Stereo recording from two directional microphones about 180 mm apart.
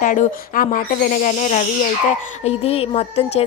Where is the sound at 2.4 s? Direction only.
35° left (ahead or behind).